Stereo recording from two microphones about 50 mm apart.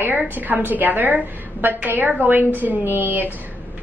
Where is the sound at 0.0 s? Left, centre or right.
Right.